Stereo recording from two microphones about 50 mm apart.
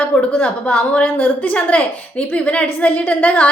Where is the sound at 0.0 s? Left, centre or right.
Left.